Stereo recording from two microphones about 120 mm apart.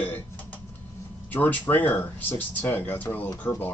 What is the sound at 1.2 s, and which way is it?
Speech, 15° left (ahead or behind).